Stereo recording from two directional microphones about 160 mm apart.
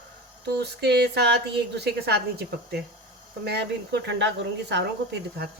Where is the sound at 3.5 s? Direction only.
90° right.